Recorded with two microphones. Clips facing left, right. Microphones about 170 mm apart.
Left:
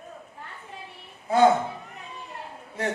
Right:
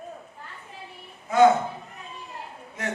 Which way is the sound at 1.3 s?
30° left (ahead or behind).